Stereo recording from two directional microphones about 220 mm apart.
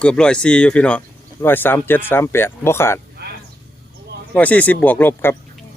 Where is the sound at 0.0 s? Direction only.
5° left (ahead or behind).